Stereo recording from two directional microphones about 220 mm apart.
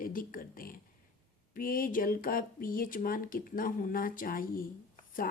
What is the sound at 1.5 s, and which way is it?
Speech, 40° left (ahead or behind).